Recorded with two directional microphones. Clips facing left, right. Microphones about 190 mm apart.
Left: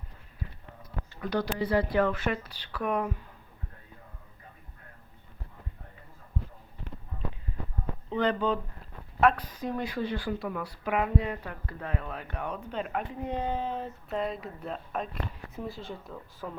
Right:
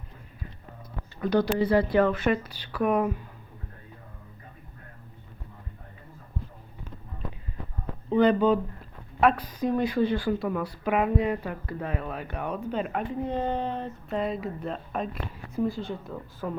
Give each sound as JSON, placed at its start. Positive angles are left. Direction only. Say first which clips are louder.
{"t": 1.3, "sound": "speech", "louder": "right 5 dB", "side_deg": -25}
{"t": 2.1, "sound": "speech", "louder": "right 6 dB", "side_deg": -15}
{"t": 8.1, "sound": "speech", "louder": "right 7 dB", "side_deg": -10}
{"t": 9.2, "sound": "speech", "louder": "right 1 dB", "side_deg": 0}
{"t": 9.6, "sound": "speech", "louder": "right 7 dB", "side_deg": -20}
{"t": 13.2, "sound": "speech", "louder": "right 2 dB", "side_deg": 10}